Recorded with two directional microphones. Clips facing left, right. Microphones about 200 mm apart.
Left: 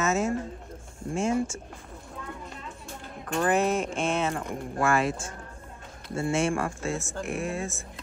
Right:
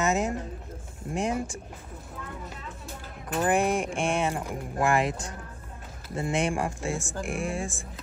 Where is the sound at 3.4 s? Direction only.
15° right (ahead or behind).